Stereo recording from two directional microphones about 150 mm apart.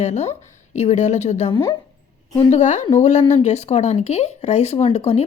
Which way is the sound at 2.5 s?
55° left (ahead or behind).